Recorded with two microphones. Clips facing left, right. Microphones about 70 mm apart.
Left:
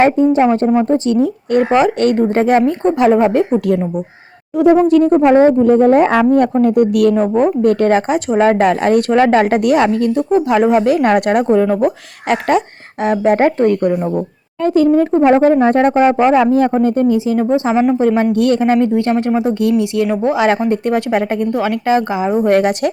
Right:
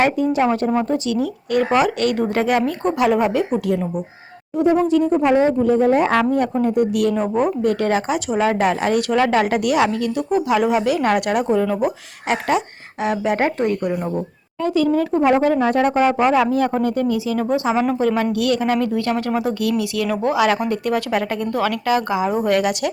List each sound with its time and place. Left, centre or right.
0.0 s speech: left
4.5 s speech: left
7.3 s speech: left
14.6 s speech: left